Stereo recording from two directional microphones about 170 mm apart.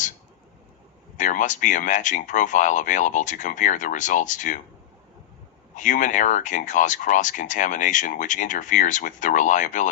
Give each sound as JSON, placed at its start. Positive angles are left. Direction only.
{"t": 1.1, "sound": "speech", "side_deg": 45}
{"t": 5.7, "sound": "speech", "side_deg": 50}